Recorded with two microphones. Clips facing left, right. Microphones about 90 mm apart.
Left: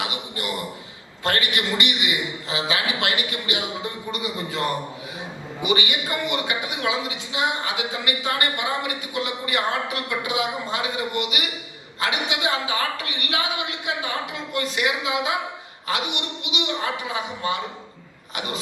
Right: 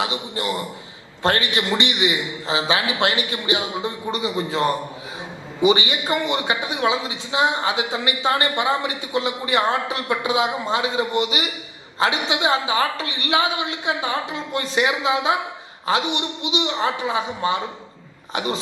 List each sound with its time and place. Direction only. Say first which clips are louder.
0.0 s a sound: right 5 dB; 25° right (ahead or behind)
1.2 s speech: right 3 dB; 25° right (ahead or behind)
5.6 s speech: right 6 dB; 25° right (ahead or behind)